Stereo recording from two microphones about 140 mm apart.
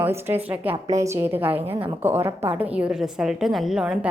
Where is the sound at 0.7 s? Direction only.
55° right (ahead or behind).